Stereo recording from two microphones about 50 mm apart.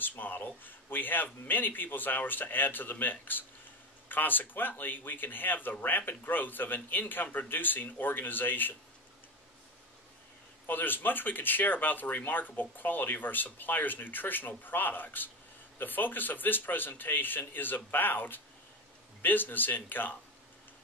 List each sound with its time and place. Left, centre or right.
0.0 s speech: left
10.7 s speech: left